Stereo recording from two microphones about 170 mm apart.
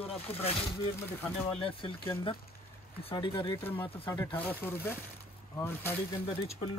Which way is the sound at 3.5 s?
10° left (ahead or behind).